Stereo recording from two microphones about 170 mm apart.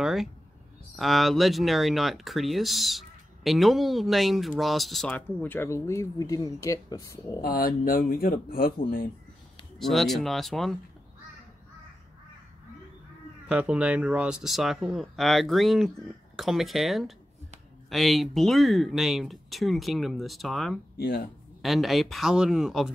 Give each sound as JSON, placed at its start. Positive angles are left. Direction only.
{"t": 0.0, "sound": "speech", "side_deg": 0}
{"t": 7.4, "sound": "speech", "side_deg": 60}
{"t": 9.8, "sound": "speech", "side_deg": 0}
{"t": 13.5, "sound": "speech", "side_deg": -5}
{"t": 21.0, "sound": "speech", "side_deg": 65}
{"t": 21.5, "sound": "speech", "side_deg": 0}